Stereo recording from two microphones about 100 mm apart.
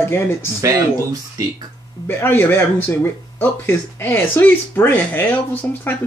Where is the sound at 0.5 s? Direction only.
30° right (ahead or behind).